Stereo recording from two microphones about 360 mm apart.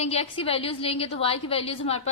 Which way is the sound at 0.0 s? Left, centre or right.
Centre.